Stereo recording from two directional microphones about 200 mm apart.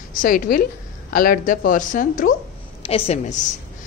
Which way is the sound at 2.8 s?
30° left (ahead or behind).